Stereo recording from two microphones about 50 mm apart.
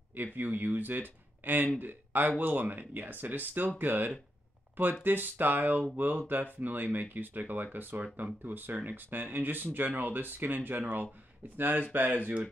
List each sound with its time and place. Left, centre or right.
0.1 s speech: right